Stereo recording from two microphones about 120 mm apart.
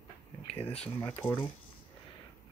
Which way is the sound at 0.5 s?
60° left (ahead or behind).